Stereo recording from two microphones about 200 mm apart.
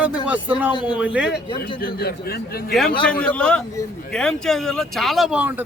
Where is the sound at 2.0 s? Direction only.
50° left (ahead or behind).